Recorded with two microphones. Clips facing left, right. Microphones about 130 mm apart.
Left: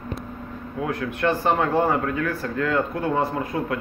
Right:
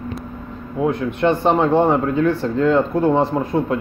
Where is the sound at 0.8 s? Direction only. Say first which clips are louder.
Right 6 dB; 20° right (ahead or behind).